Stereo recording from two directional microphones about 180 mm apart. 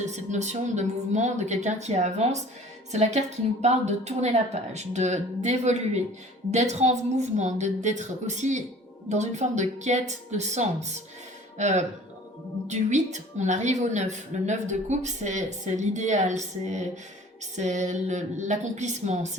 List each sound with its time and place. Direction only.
0.0 s a woman's voice: 40° right (ahead or behind)